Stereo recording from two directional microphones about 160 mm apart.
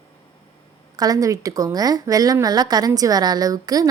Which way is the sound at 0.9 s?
25° right (ahead or behind).